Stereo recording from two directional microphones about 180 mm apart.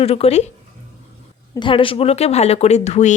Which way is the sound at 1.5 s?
30° left (ahead or behind).